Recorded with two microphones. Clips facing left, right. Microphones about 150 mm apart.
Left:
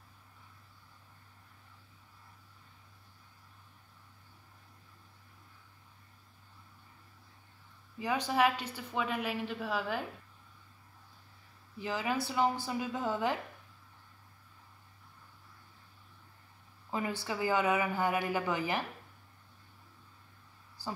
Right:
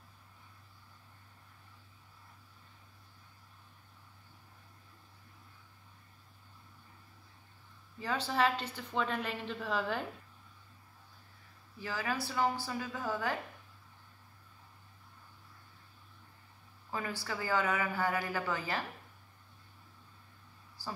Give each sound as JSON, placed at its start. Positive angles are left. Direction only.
{"t": 8.0, "sound": "a woman's voice", "side_deg": 15}
{"t": 11.8, "sound": "speech", "side_deg": 20}
{"t": 16.9, "sound": "speech", "side_deg": 20}